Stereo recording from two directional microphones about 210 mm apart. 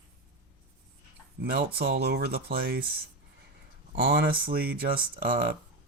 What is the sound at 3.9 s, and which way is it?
Speech, 45° right (ahead or behind).